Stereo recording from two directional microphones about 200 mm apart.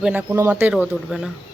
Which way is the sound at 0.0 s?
10° right (ahead or behind).